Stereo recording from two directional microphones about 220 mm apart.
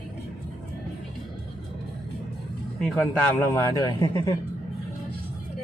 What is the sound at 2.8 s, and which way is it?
A man's voice, 10° left (ahead or behind).